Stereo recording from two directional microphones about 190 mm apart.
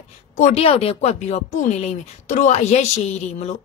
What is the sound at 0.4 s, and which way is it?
A woman's voice, 35° left (ahead or behind).